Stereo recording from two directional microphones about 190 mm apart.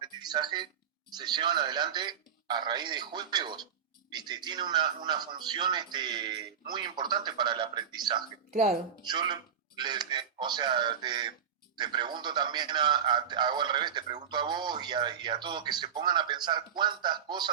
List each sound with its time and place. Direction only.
0.0 s a man's voice: 20° right (ahead or behind)
8.4 s speech: 40° right (ahead or behind)
9.0 s a man's voice: 25° right (ahead or behind)